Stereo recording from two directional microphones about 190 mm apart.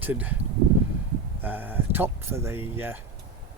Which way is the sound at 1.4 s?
10° right (ahead or behind).